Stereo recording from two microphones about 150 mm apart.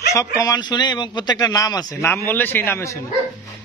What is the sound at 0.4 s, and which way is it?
A man's voice, 25° left (ahead or behind).